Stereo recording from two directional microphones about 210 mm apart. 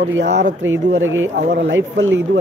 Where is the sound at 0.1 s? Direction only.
55° right (ahead or behind).